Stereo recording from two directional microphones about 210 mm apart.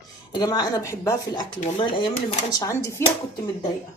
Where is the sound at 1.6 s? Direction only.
25° left (ahead or behind).